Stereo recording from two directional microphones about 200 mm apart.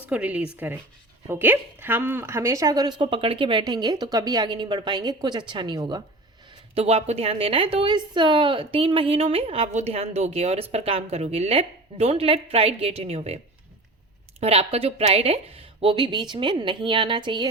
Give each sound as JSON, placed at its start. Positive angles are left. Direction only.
{"t": 0.1, "sound": "a woman's voice", "side_deg": -5}